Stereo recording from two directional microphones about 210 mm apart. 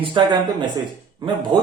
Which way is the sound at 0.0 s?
20° right (ahead or behind).